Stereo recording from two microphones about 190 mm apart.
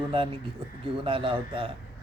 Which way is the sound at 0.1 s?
25° right (ahead or behind).